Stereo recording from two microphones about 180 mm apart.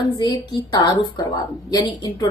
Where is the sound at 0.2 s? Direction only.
25° left (ahead or behind).